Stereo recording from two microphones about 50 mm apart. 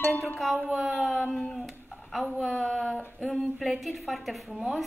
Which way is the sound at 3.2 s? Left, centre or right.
Centre.